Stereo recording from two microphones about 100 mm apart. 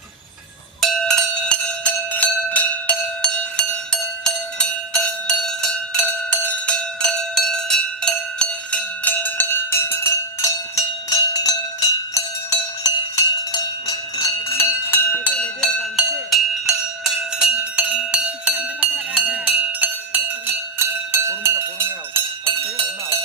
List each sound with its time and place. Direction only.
0.8 s bell: centre (ahead or behind)
4.2 s music: 5° left (ahead or behind); by 13.6 s 40° left (ahead or behind)
14.2 s cowbell: 25° left (ahead or behind)
16.3 s music: 5° right (ahead or behind)
20.7 s music: 25° right (ahead or behind)